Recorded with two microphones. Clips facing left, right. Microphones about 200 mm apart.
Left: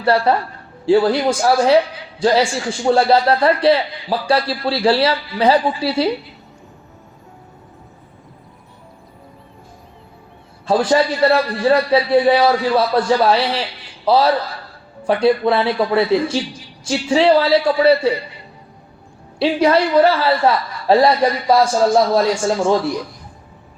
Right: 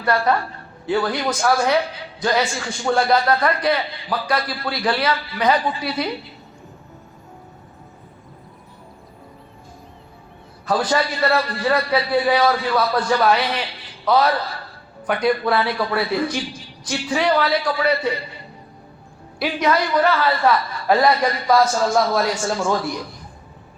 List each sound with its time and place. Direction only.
0.0 s a woman's voice: 30° left (ahead or behind)
10.7 s speech: 25° left (ahead or behind)
19.4 s speech: 30° left (ahead or behind)